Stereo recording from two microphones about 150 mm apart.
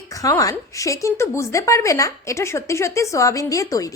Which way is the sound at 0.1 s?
20° left (ahead or behind).